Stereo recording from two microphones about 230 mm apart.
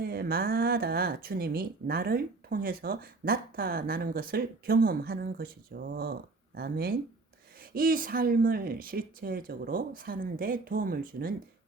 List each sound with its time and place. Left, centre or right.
0.0 s speech: right